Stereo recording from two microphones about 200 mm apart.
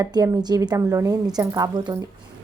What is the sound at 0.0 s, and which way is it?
Speech, 20° right (ahead or behind).